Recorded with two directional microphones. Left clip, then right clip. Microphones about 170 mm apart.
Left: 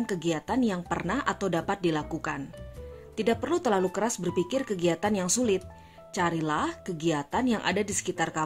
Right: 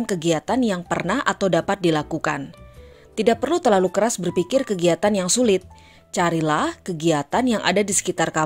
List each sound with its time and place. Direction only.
0.0 s a woman's voice: 30° right (ahead or behind)